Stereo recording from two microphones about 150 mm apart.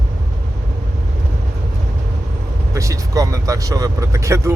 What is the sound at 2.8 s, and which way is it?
Vehicle, 20° right (ahead or behind).